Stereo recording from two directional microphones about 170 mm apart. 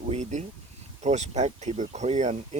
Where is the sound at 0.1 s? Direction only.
45° right (ahead or behind).